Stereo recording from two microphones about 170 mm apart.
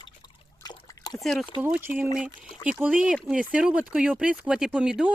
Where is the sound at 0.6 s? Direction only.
25° left (ahead or behind).